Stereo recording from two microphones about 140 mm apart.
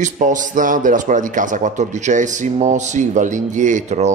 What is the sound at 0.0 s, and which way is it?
A man's voice, 65° right (ahead or behind).